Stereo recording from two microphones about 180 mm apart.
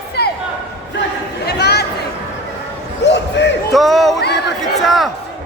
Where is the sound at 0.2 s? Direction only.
65° left (ahead or behind).